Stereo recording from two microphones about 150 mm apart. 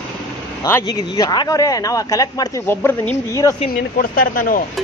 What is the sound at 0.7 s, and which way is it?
Speech, 20° left (ahead or behind).